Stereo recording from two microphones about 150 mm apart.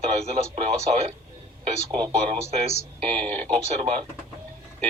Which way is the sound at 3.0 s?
10° left (ahead or behind).